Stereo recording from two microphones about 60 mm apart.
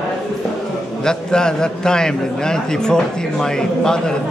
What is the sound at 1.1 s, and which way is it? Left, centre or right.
A man's voice, centre.